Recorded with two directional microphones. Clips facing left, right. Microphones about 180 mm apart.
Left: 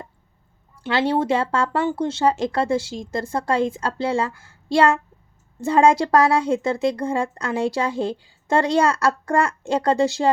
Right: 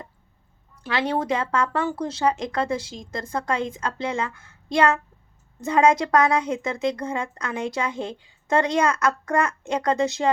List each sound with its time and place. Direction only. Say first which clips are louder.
0.8 s speech: left 4 dB; 30° left (ahead or behind)